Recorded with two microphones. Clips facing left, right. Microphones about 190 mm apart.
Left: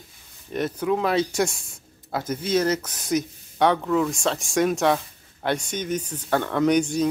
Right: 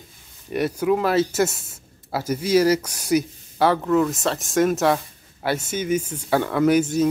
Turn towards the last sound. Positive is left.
turn(degrees=-5)  # may be behind; listen again after turning